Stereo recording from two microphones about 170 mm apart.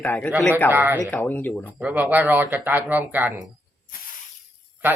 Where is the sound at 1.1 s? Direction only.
10° left (ahead or behind).